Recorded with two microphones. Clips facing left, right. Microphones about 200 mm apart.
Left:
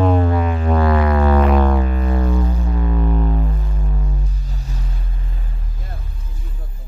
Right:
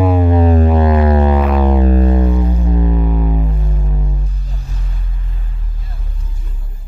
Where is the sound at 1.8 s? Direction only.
35° right (ahead or behind).